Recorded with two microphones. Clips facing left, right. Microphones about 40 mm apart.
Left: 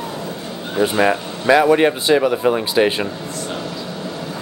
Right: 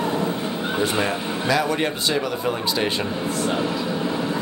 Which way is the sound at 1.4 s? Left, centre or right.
Left.